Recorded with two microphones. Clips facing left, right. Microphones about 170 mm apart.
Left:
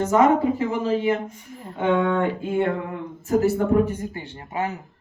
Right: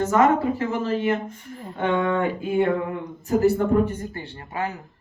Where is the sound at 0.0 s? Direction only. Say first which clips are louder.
Left 1 dB; 20° left (ahead or behind).